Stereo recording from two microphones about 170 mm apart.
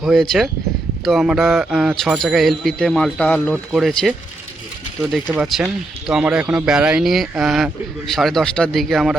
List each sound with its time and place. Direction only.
0.0 s speech: centre (ahead or behind)
5.3 s speech: 5° right (ahead or behind)